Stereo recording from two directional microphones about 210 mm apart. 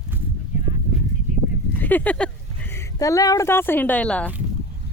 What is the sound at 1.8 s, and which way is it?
Speech, 10° left (ahead or behind).